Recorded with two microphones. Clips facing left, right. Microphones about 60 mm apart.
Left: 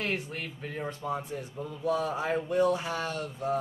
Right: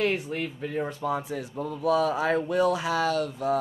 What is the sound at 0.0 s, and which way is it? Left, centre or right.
Speech, right.